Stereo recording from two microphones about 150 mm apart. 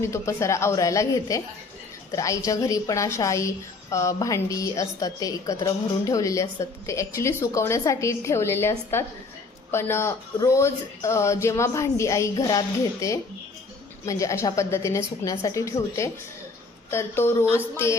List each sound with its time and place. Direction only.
0.0 s a woman's voice: 20° left (ahead or behind)